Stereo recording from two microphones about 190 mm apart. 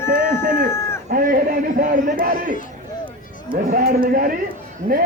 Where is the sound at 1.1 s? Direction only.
50° right (ahead or behind).